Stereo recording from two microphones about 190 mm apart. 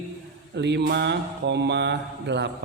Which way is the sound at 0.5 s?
65° right (ahead or behind).